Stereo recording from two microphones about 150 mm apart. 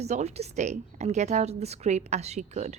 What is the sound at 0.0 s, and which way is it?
A woman's voice, 50° right (ahead or behind).